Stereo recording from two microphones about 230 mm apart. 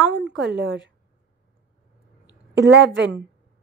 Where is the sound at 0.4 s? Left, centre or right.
Right.